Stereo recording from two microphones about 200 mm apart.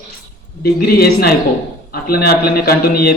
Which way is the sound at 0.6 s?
50° left (ahead or behind).